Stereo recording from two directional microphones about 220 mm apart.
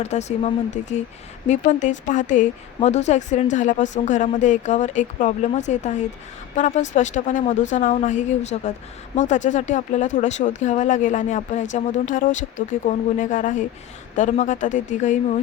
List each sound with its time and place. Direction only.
0.0 s speech: 30° left (ahead or behind)